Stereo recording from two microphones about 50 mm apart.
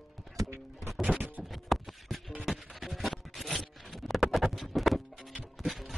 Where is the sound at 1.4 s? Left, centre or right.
Centre.